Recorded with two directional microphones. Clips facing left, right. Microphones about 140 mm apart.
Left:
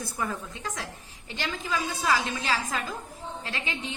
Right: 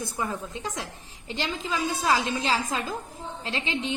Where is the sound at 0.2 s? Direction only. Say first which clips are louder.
Right 1 dB; 20° right (ahead or behind).